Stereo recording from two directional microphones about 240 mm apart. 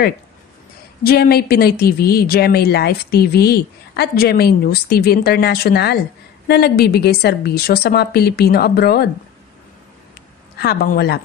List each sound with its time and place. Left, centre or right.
1.0 s speech: left
10.6 s speech: left